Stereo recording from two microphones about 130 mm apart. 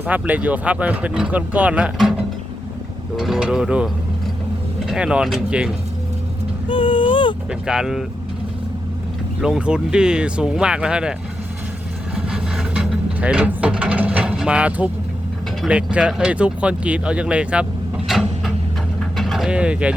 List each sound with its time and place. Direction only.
0.0 s speech: 10° right (ahead or behind)
3.2 s mechanisms: 5° right (ahead or behind)
4.9 s speech: 5° right (ahead or behind)
6.7 s a sound: 40° left (ahead or behind)
7.7 s mechanisms: 5° right (ahead or behind)
9.4 s speech: 5° right (ahead or behind)
12.1 s a sound: 5° right (ahead or behind)
15.6 s speech: 10° right (ahead or behind)
19.1 s a sound: centre (ahead or behind)